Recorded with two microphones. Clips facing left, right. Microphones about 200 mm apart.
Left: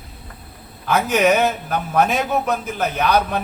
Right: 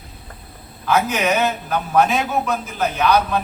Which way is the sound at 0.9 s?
50° left (ahead or behind).